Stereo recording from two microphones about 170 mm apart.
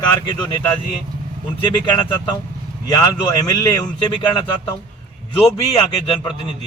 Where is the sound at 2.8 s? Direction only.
25° left (ahead or behind).